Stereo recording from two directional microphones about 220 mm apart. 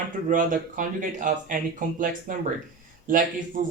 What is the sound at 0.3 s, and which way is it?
Speech, 35° right (ahead or behind).